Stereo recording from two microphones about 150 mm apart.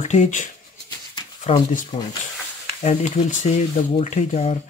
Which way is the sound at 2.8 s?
50° left (ahead or behind).